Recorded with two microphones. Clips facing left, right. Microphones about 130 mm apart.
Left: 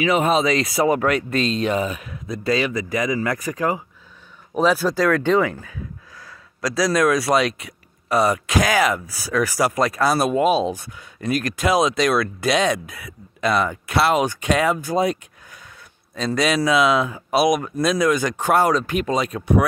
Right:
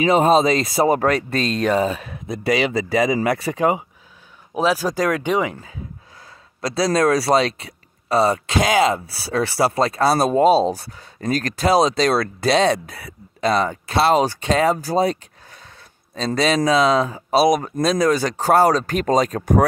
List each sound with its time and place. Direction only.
0.0 s speech: 35° right (ahead or behind)
4.6 s speech: 10° right (ahead or behind); by 19.6 s 40° right (ahead or behind)